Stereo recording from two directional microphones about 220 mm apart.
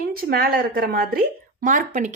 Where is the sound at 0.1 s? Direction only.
45° right (ahead or behind).